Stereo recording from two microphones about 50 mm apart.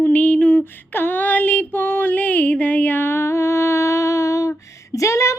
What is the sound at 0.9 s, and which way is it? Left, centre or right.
Music, left.